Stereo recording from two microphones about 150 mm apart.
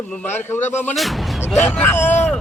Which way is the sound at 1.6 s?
10° left (ahead or behind).